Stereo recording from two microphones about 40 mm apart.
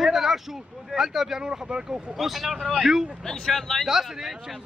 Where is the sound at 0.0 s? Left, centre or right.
Centre.